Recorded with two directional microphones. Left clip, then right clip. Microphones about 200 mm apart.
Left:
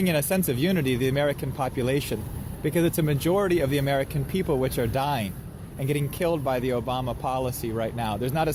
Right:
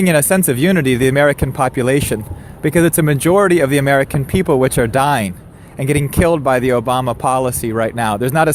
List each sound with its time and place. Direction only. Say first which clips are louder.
0.0 s speech: right 11 dB; 40° right (ahead or behind)